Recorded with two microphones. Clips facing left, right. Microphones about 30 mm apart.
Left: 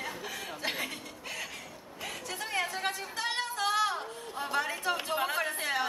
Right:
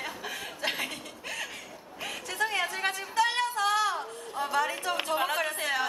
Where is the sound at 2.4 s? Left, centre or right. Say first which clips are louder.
Right 5 dB; right.